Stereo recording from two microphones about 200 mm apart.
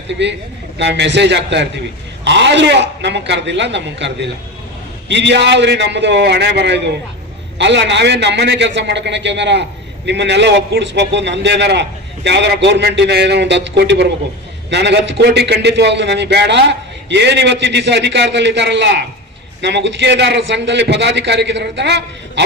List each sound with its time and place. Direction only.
0.1 s a man's voice: 60° right (ahead or behind)